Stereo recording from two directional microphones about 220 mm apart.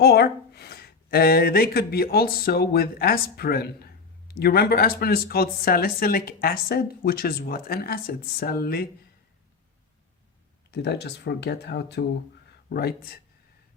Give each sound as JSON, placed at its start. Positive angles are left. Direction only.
{"t": 0.0, "sound": "speech", "side_deg": 45}
{"t": 10.7, "sound": "speech", "side_deg": 50}